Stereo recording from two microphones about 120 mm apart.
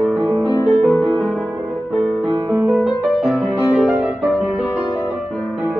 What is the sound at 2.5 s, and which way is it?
Music, 15° right (ahead or behind).